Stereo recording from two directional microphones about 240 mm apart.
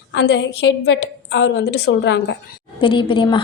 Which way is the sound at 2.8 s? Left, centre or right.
Left.